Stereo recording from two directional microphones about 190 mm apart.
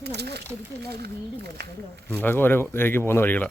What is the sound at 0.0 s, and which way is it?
Speech, 60° right (ahead or behind).